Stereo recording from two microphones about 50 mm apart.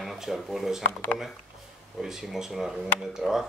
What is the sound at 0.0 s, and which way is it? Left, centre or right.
Speech, centre.